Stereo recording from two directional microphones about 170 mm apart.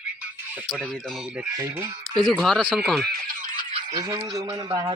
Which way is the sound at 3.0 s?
55° right (ahead or behind).